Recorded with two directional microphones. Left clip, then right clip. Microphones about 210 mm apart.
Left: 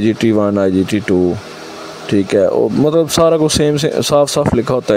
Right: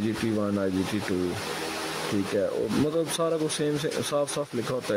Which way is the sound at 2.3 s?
45° left (ahead or behind).